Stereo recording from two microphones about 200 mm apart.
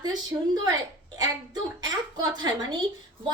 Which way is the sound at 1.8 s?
20° right (ahead or behind).